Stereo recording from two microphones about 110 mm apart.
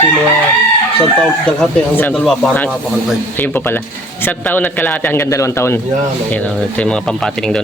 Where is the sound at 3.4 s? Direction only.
15° left (ahead or behind).